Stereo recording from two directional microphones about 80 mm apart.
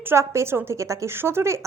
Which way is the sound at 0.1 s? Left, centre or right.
Right.